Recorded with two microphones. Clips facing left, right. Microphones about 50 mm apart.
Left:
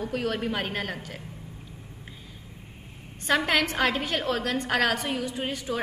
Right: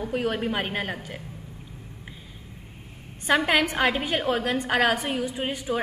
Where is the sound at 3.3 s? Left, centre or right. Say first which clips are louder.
Right 2 dB; centre.